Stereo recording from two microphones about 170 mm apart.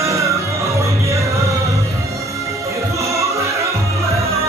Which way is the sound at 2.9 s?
20° right (ahead or behind).